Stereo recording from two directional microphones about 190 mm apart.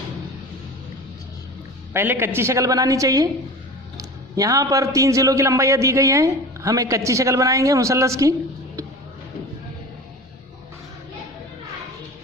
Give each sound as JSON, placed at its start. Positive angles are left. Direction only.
{"t": 1.9, "sound": "a man's voice", "side_deg": -10}